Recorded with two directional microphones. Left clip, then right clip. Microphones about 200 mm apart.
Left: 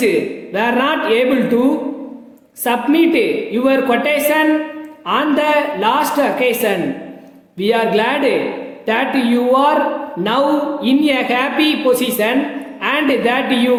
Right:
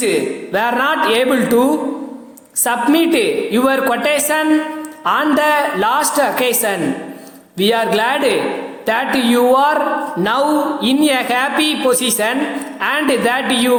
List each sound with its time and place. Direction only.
0.0 s a woman's voice: 15° right (ahead or behind)
2.6 s a woman's voice: 15° right (ahead or behind)